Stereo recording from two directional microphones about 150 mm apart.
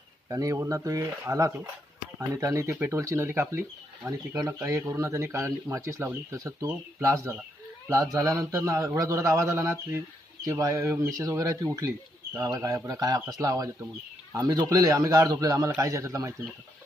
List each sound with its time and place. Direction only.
0.3 s speech: 20° right (ahead or behind)